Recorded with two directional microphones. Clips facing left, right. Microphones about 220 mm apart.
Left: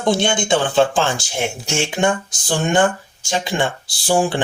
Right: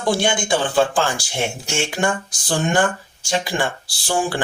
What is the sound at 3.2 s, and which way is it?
Speech, 20° left (ahead or behind).